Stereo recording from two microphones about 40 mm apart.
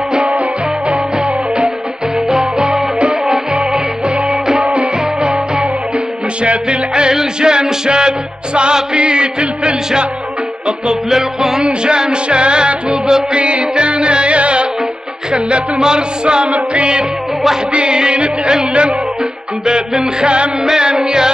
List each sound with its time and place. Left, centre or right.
0.1 s music: centre
2.2 s music: centre
10.9 s music: centre
16.5 s music: right